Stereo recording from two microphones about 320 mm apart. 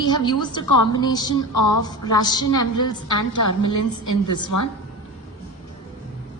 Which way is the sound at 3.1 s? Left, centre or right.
Left.